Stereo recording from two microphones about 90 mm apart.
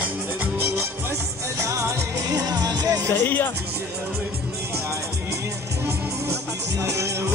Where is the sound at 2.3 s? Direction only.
45° right (ahead or behind).